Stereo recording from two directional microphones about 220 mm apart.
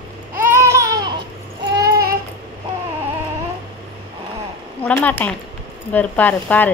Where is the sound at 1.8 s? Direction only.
45° right (ahead or behind).